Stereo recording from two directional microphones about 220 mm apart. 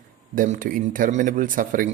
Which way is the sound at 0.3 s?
40° right (ahead or behind).